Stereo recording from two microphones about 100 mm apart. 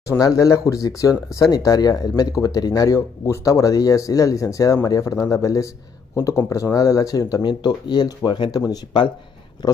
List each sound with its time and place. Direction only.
0.2 s speech: 35° left (ahead or behind)
7.4 s speech: 50° left (ahead or behind)